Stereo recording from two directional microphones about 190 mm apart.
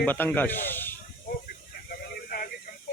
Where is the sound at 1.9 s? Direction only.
50° left (ahead or behind).